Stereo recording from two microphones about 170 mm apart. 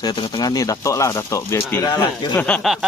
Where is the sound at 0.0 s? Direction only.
30° left (ahead or behind).